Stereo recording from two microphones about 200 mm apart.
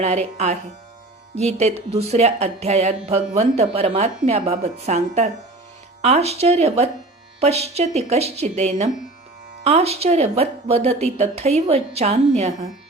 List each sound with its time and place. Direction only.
0.0 s a woman's voice: 35° right (ahead or behind)